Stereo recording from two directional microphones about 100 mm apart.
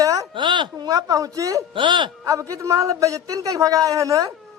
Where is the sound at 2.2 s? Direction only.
35° right (ahead or behind).